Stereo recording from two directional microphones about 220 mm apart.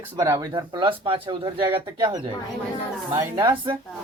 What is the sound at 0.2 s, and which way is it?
A man's voice, 15° right (ahead or behind).